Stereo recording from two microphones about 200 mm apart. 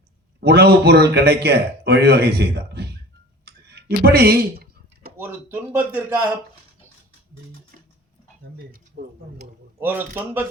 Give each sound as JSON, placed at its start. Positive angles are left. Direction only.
{"t": 0.3, "sound": "a man's voice", "side_deg": -55}
{"t": 3.4, "sound": "a sound", "side_deg": -55}
{"t": 5.1, "sound": "speech", "side_deg": -10}
{"t": 8.5, "sound": "speech", "side_deg": -50}
{"t": 9.8, "sound": "speech", "side_deg": -10}